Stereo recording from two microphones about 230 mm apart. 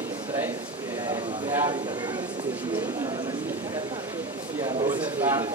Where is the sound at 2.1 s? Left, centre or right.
Centre.